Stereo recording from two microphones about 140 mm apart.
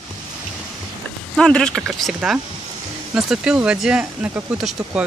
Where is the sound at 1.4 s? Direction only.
5° left (ahead or behind).